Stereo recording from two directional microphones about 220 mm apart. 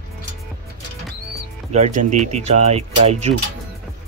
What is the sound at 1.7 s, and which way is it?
Speech, 35° right (ahead or behind).